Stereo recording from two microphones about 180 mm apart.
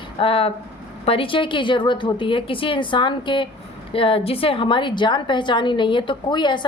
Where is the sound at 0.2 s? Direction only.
30° left (ahead or behind).